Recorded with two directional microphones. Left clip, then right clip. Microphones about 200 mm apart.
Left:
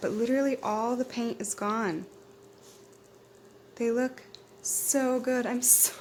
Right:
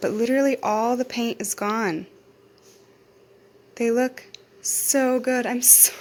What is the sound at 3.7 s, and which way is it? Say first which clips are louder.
Speech: right 7 dB; 15° right (ahead or behind).